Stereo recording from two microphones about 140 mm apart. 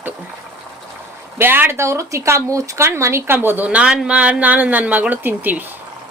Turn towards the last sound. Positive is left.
turn(degrees=-15)  # may be behind; listen again after turning